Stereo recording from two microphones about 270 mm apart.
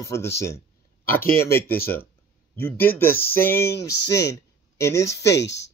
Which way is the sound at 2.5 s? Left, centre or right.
Centre.